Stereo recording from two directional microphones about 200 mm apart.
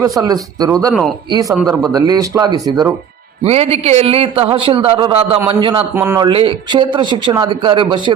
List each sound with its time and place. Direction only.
0.0 s a man's voice: 20° right (ahead or behind)
3.4 s a man's voice: 30° right (ahead or behind)
5.9 s a man's voice: 10° right (ahead or behind)
6.1 s a man's voice: 25° right (ahead or behind)